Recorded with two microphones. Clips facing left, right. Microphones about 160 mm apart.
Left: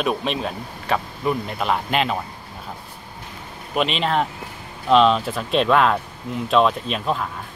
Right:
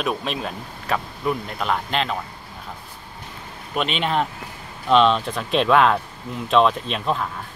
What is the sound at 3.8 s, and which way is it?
Speech, centre (ahead or behind).